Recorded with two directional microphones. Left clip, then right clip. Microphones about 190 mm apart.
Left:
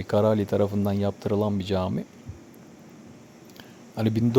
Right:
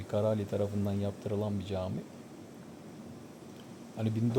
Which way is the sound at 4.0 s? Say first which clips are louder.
Left 10 dB; 55° left (ahead or behind).